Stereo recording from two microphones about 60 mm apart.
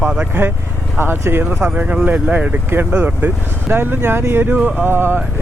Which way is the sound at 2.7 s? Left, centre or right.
Right.